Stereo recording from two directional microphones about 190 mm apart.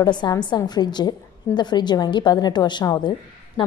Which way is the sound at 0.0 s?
20° left (ahead or behind).